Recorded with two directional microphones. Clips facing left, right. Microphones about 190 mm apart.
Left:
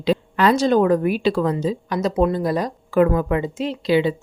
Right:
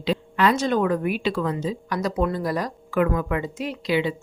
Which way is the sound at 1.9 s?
25° left (ahead or behind).